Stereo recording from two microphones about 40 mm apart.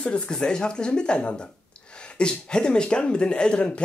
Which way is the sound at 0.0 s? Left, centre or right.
Left.